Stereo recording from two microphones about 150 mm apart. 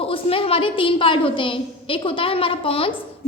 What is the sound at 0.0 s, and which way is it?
A woman's voice, 40° left (ahead or behind).